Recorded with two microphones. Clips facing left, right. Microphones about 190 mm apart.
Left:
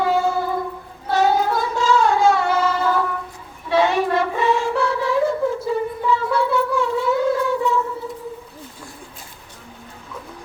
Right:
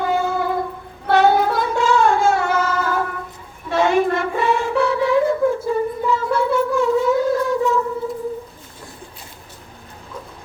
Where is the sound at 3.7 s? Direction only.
50° right (ahead or behind).